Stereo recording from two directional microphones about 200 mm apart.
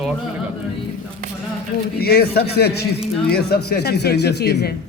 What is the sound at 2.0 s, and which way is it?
A man's voice, 50° left (ahead or behind).